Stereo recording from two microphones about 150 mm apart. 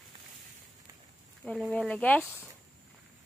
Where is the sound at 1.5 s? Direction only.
5° left (ahead or behind).